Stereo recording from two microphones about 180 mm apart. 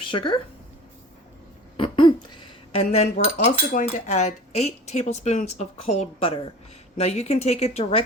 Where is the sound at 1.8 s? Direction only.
30° left (ahead or behind).